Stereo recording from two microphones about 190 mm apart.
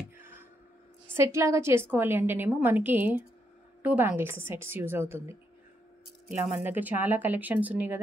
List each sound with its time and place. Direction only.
0.2 s a sound: 10° right (ahead or behind)
1.1 s a woman's voice: 15° right (ahead or behind)
6.3 s speech: 40° left (ahead or behind)
6.6 s a woman's voice: 10° right (ahead or behind)